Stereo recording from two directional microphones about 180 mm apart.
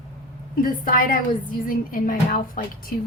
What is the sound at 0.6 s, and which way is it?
Speech, 50° left (ahead or behind).